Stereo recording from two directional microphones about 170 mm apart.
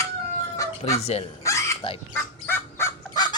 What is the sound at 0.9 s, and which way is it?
Speech, 40° left (ahead or behind).